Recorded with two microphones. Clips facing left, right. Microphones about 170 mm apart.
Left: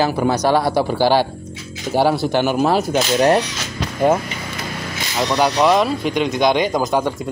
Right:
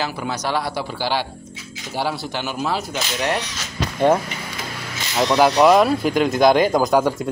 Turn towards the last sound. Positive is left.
turn(degrees=0)  # may be behind; listen again after turning